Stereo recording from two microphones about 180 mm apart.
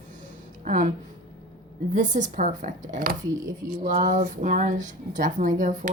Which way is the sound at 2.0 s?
45° right (ahead or behind).